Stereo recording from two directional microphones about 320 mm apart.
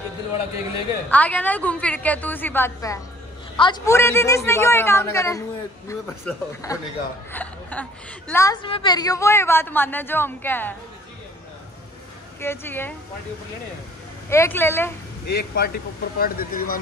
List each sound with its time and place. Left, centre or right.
1.1 s a woman's voice: centre
12.4 s a woman's voice: centre
14.3 s a woman's voice: centre
15.2 s speech: left